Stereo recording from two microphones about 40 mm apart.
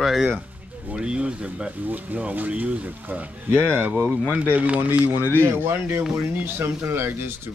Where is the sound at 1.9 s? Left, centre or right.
Right.